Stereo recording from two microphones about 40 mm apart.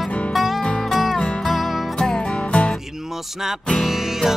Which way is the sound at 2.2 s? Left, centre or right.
Left.